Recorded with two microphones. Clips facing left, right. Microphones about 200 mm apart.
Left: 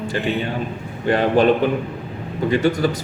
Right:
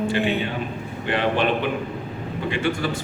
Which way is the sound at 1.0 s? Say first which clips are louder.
Left 6 dB; 40° left (ahead or behind).